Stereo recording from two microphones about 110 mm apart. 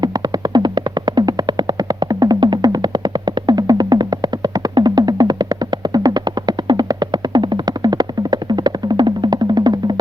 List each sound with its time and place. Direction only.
0.5 s music: 40° right (ahead or behind)
5.9 s a sound: 40° right (ahead or behind)
7.3 s music: 40° right (ahead or behind)